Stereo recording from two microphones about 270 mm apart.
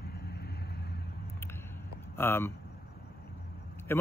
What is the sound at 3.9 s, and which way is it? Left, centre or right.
Speech, centre.